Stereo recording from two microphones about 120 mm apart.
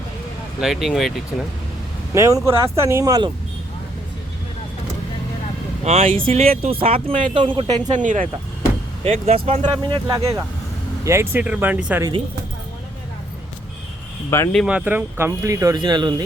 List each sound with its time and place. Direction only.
0.6 s speech: centre (ahead or behind)
2.1 s speech: 25° right (ahead or behind)
5.8 s speech: 65° right (ahead or behind); by 7.8 s 45° right (ahead or behind)
7.9 s speech: 90° right
9.0 s speech: 60° right (ahead or behind)
10.2 s speech: 25° right (ahead or behind)
14.3 s speech: 25° left (ahead or behind)
14.7 s speech: 10° right (ahead or behind)
15.3 s speech: 25° right (ahead or behind)